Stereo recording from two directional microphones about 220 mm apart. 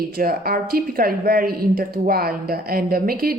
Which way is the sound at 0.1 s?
40° right (ahead or behind).